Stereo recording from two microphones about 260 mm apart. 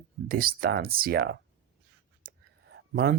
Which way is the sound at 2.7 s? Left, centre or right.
Right.